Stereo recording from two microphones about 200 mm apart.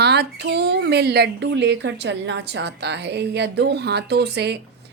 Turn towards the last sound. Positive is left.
turn(degrees=-55)  # may be behind; listen again after turning